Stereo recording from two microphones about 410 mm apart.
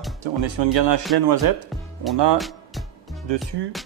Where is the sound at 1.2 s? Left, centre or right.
Right.